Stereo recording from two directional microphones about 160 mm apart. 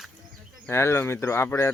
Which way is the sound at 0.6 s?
15° left (ahead or behind).